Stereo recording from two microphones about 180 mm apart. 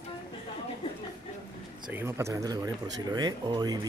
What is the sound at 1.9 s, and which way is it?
Speech, 15° right (ahead or behind).